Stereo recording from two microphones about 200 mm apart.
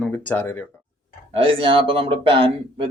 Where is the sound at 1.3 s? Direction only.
30° right (ahead or behind).